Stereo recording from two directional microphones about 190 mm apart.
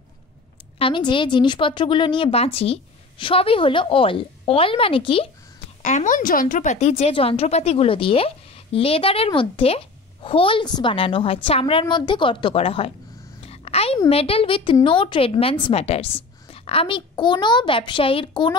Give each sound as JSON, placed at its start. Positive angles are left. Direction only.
{"t": 0.7, "sound": "a woman's voice", "side_deg": 25}
{"t": 5.8, "sound": "a woman's voice", "side_deg": 40}
{"t": 13.4, "sound": "a sound", "side_deg": 30}
{"t": 13.9, "sound": "a woman's voice", "side_deg": 30}